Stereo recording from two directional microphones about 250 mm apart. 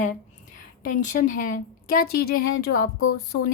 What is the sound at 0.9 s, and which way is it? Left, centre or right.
Speech, left.